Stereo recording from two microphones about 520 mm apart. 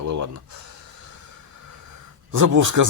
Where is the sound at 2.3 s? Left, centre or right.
Right.